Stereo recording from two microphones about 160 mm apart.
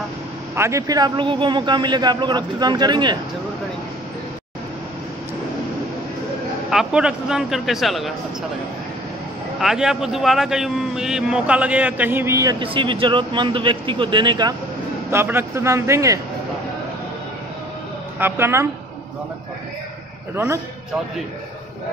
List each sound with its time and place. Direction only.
0.6 s a man's voice: 20° right (ahead or behind)
6.7 s a man's voice: 5° right (ahead or behind)
9.6 s a man's voice: 5° right (ahead or behind); by 12.6 s 20° right (ahead or behind)
12.6 s speech: 30° right (ahead or behind)
15.0 s speech: 15° right (ahead or behind)
18.2 s speech: 15° right (ahead or behind)
20.3 s a man's voice: 20° right (ahead or behind)